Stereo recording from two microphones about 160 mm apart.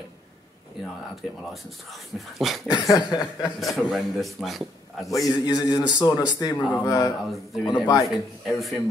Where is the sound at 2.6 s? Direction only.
25° left (ahead or behind).